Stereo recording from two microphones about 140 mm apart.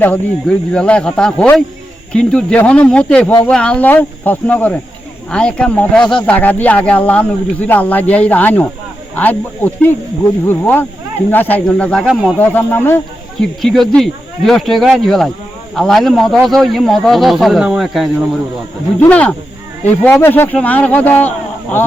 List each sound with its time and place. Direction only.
0.4 s speech: 5° left (ahead or behind)
12.4 s speech: 15° left (ahead or behind)
13.6 s speech: 5° left (ahead or behind)
19.0 s speech: 10° left (ahead or behind)